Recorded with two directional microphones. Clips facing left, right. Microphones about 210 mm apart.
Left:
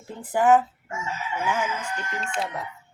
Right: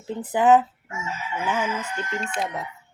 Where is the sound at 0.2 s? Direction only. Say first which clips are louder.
Right 1 dB; 20° right (ahead or behind).